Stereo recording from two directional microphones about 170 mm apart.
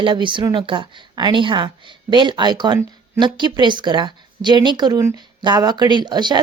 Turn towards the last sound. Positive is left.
turn(degrees=-25)  # may be behind; listen again after turning